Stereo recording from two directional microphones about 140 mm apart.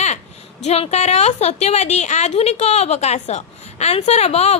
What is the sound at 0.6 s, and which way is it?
A woman's voice, 50° left (ahead or behind).